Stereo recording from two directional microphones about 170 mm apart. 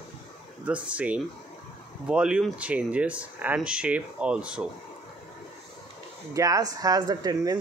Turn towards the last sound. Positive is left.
turn(degrees=-25)  # may be behind; listen again after turning